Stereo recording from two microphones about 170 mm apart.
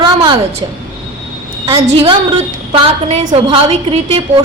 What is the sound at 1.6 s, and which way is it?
A woman's voice, 30° right (ahead or behind).